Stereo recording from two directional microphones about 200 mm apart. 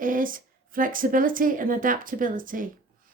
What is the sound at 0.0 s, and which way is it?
Speech, 45° right (ahead or behind).